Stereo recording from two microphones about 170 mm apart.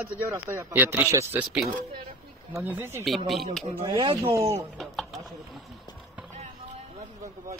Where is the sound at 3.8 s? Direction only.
30° right (ahead or behind).